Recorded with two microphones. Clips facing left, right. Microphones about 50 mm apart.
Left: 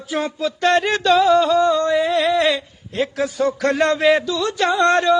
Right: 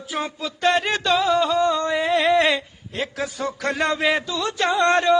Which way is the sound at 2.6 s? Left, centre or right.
Centre.